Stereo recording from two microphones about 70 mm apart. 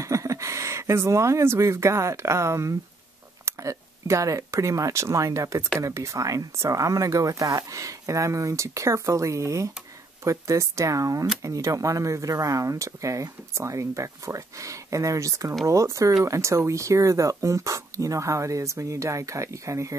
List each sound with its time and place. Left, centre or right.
0.0 s speech: right